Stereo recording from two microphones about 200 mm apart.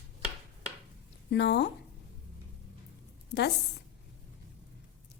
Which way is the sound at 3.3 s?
55° left (ahead or behind).